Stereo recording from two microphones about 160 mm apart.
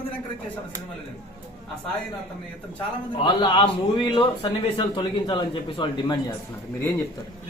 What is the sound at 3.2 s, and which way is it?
A man's voice, 30° left (ahead or behind).